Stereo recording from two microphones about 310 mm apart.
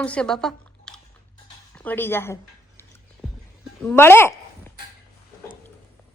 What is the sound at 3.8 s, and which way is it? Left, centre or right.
Speech, centre.